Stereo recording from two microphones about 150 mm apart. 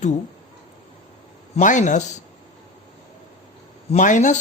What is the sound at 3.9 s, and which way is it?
Speech, 55° left (ahead or behind).